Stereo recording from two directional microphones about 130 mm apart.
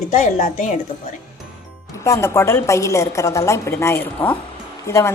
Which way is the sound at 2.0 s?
20° left (ahead or behind).